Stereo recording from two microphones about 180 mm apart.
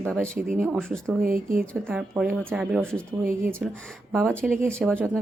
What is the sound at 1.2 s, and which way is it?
Speech, 50° right (ahead or behind).